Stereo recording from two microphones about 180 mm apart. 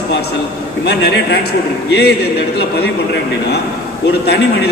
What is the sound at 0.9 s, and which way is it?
A man's voice, 70° left (ahead or behind).